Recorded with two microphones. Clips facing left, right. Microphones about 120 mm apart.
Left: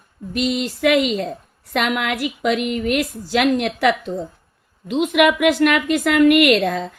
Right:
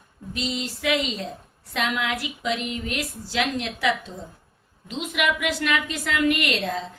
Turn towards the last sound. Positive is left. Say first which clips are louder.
# left 11 dB
turn(degrees=60)  # may be behind; listen again after turning